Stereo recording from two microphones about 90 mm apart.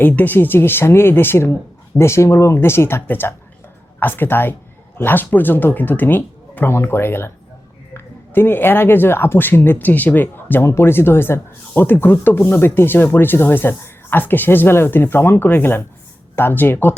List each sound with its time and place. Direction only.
0.0 s speech: 20° left (ahead or behind)